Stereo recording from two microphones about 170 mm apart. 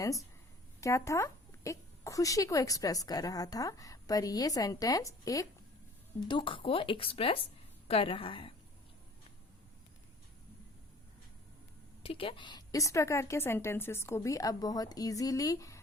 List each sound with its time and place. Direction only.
0.0 s speech: 20° left (ahead or behind)
12.0 s speech: 30° left (ahead or behind)